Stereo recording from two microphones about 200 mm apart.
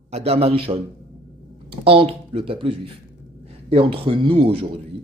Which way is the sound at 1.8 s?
25° right (ahead or behind).